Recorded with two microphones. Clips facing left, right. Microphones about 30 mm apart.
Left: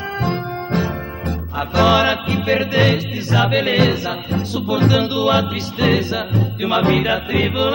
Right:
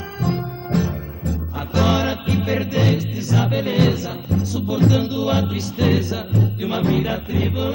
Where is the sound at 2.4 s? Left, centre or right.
Left.